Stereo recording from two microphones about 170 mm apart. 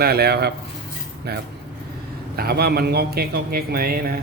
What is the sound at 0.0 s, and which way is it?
A man's voice, 70° right (ahead or behind).